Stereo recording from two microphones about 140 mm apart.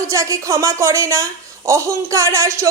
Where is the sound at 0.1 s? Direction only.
20° right (ahead or behind).